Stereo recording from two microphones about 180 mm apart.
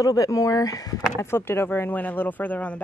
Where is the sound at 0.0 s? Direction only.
20° left (ahead or behind).